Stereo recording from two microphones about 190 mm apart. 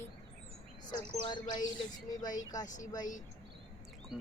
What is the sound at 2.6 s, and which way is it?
Speech, 40° left (ahead or behind).